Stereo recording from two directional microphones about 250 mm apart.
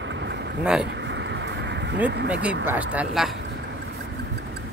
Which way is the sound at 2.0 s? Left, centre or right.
Right.